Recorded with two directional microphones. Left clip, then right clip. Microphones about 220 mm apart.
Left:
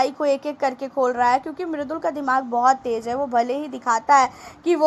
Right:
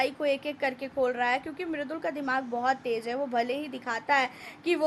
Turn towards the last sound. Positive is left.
turn(degrees=15)  # may be behind; listen again after turning